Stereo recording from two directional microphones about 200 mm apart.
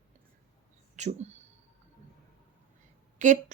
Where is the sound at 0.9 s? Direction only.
35° right (ahead or behind).